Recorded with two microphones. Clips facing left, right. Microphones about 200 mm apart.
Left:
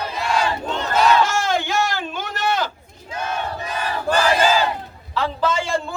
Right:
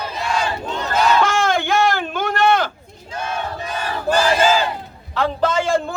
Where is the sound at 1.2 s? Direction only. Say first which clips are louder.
Right 2 dB; 50° right (ahead or behind).